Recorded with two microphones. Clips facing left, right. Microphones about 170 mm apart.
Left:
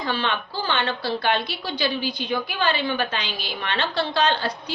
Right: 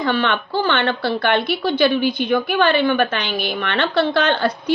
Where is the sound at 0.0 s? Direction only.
60° right (ahead or behind).